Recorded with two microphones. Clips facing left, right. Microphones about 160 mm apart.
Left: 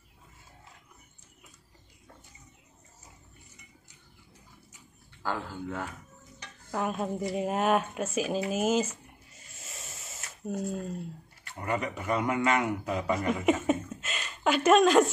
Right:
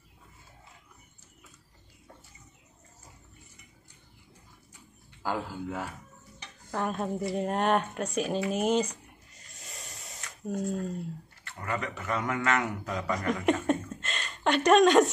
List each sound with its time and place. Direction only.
5.2 s speech: 10° right (ahead or behind)
6.7 s speech: 5° left (ahead or behind)
9.7 s a sound: 5° left (ahead or behind)
10.4 s speech: centre (ahead or behind)
11.6 s a man's voice: 20° left (ahead or behind); by 15.0 s centre (ahead or behind)